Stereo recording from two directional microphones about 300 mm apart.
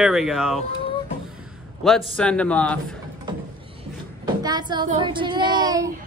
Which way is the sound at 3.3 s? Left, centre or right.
Centre.